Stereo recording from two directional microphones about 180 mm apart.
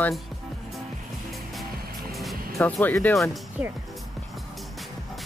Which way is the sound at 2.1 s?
Centre (ahead or behind).